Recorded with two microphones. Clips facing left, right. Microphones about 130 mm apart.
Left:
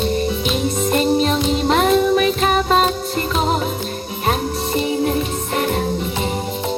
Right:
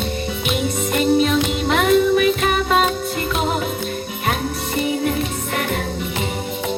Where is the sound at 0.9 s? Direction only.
30° left (ahead or behind).